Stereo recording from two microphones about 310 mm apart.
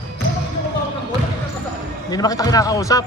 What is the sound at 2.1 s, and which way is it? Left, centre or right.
Speech, centre.